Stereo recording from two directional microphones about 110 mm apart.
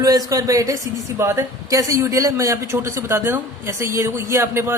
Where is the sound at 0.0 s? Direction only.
35° right (ahead or behind).